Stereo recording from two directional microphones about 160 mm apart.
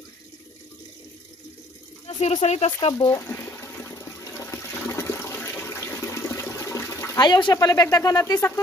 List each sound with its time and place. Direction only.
2.0 s a sound: 40° left (ahead or behind)
2.4 s speech: 45° left (ahead or behind)
3.1 s water: 15° left (ahead or behind)
7.2 s speech: 30° left (ahead or behind)